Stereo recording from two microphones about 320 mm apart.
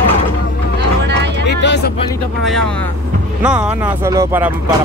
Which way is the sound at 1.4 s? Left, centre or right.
Left.